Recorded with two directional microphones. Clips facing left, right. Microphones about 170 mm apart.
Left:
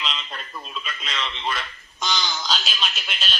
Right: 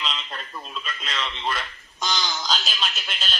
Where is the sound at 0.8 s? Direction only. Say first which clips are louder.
Even; centre (ahead or behind).